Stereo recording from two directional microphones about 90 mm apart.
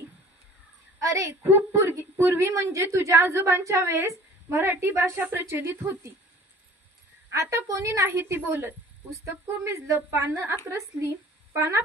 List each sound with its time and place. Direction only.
1.0 s a woman's voice: 35° right (ahead or behind)
7.2 s a woman's voice: 35° right (ahead or behind)